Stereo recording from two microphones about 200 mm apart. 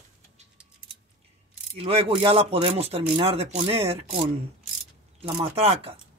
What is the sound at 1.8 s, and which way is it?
Speech, 30° right (ahead or behind).